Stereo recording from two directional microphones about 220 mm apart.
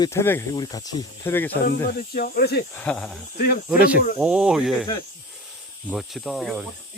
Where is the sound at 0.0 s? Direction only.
10° left (ahead or behind).